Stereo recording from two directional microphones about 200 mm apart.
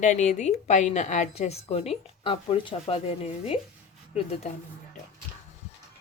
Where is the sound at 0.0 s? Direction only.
35° left (ahead or behind).